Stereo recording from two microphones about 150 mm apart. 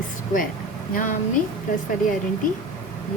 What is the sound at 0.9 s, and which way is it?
Speech, 60° left (ahead or behind).